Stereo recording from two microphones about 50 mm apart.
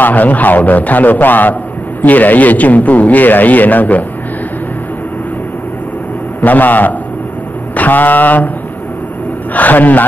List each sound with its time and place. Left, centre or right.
0.0 s a man's voice: left
6.4 s a man's voice: left
9.5 s a man's voice: left